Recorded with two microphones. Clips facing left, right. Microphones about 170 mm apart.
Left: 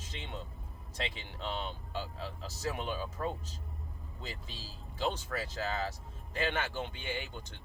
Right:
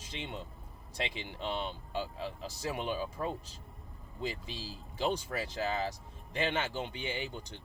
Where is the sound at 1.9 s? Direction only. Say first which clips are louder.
Right 4 dB; 15° right (ahead or behind).